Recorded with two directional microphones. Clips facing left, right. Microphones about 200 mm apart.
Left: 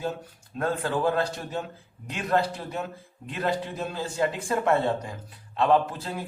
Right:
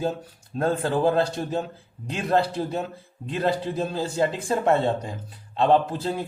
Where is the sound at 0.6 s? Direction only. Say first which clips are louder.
Right 4 dB; 30° right (ahead or behind).